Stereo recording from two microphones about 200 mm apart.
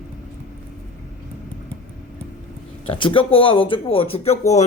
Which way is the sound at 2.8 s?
25° left (ahead or behind).